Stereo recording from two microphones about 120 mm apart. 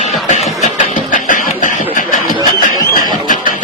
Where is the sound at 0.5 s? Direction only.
90° left.